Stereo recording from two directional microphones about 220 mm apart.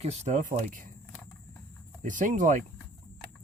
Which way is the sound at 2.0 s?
35° right (ahead or behind).